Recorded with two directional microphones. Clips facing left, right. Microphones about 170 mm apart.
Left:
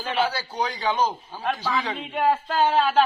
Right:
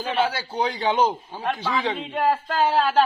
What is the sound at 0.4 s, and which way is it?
A woman's voice, 25° right (ahead or behind).